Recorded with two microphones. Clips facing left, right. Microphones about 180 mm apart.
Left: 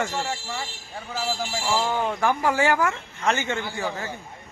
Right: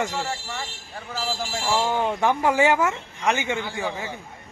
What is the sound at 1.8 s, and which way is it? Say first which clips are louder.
Speech: right 3 dB; 15° right (ahead or behind).